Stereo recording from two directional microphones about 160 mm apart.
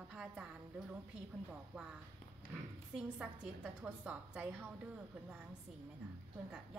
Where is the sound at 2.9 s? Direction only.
5° right (ahead or behind).